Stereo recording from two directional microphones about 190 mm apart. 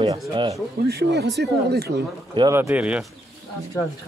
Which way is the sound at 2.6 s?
10° right (ahead or behind).